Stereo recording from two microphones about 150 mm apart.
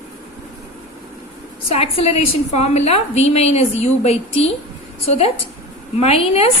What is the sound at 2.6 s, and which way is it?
A woman's voice, 45° left (ahead or behind).